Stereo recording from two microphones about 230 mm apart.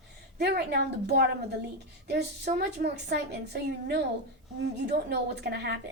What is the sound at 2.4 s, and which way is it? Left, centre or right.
A woman's voice, right.